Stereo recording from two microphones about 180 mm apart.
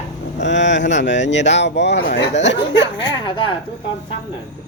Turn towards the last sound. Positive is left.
turn(degrees=30)  # may be behind; listen again after turning